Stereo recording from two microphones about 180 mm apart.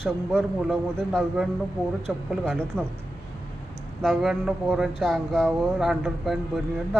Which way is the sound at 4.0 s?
Centre (ahead or behind).